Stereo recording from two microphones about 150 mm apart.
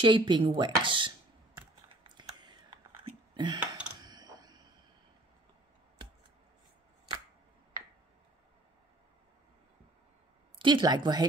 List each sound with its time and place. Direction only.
0.0 s speech: 30° right (ahead or behind)
0.6 s computer keyboard: 35° right (ahead or behind)
2.0 s whispering: 30° right (ahead or behind)
3.5 s computer keyboard: 10° right (ahead or behind)
4.0 s creak: 25° right (ahead or behind)
10.6 s speech: 30° right (ahead or behind)